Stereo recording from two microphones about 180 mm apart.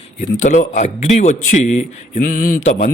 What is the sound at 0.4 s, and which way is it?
A man's voice, 40° left (ahead or behind).